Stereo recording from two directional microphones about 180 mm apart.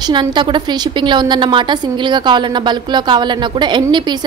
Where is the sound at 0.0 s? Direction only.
25° right (ahead or behind).